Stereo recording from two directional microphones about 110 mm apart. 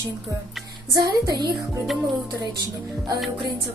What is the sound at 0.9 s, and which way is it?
Speech, 40° right (ahead or behind).